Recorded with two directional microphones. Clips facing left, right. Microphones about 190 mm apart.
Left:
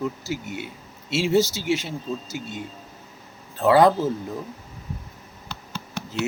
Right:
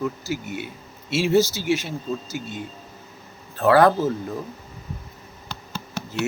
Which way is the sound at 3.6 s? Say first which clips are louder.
Even; 20° left (ahead or behind).